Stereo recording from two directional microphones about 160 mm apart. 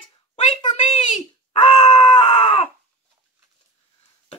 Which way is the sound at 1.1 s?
40° left (ahead or behind).